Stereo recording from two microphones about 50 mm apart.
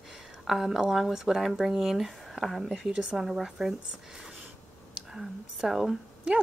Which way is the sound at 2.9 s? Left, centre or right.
Centre.